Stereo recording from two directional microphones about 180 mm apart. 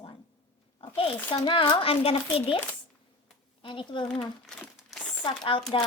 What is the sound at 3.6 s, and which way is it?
Speech, 30° left (ahead or behind).